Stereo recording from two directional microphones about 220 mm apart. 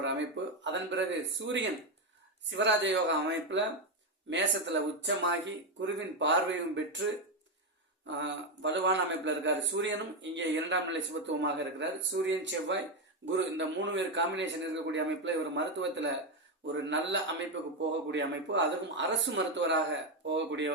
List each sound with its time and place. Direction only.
0.0 s a man's voice: 55° right (ahead or behind)
8.2 s a man's voice: 55° right (ahead or behind)